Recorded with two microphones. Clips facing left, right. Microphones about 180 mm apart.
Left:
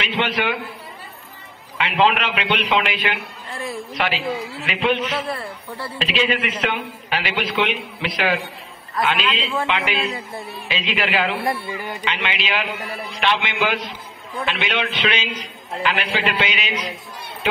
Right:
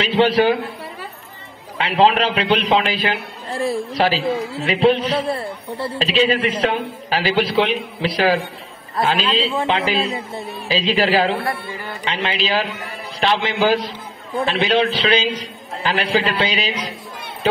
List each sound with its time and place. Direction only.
0.0 s a man's voice: 35° right (ahead or behind)
1.8 s a man's voice: 35° right (ahead or behind)
11.4 s music: 20° left (ahead or behind)
12.0 s a man's voice: 35° right (ahead or behind)